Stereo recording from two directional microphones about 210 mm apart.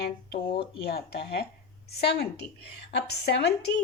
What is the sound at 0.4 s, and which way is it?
Speech, 25° left (ahead or behind).